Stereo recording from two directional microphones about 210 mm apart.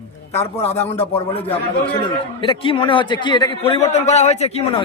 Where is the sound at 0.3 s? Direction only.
10° left (ahead or behind).